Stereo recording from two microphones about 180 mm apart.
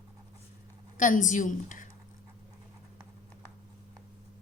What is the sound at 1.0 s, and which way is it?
Speech, 45° left (ahead or behind).